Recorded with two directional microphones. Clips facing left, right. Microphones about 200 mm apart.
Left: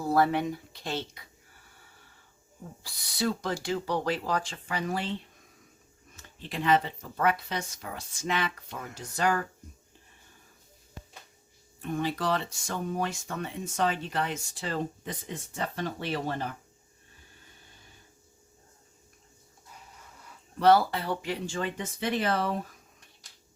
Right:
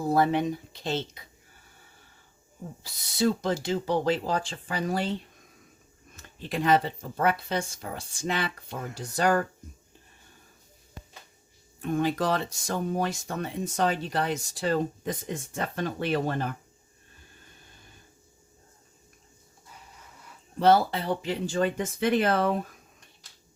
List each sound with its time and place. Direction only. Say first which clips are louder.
0.0 s speech: right 2 dB; 20° right (ahead or behind)
2.8 s speech: right 5 dB; 25° right (ahead or behind)
6.5 s speech: right 2 dB; 40° right (ahead or behind)
11.8 s speech: right 4 dB; 45° right (ahead or behind)
20.6 s speech: right 1 dB; 25° right (ahead or behind)
22.0 s speech: right 5 dB; 55° right (ahead or behind)